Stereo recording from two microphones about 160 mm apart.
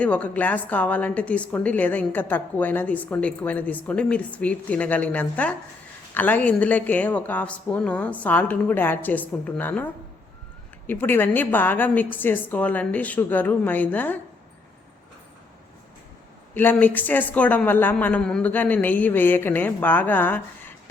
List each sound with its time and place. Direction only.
0.0 s a woman's voice: 10° left (ahead or behind)
16.6 s a woman's voice: 10° left (ahead or behind)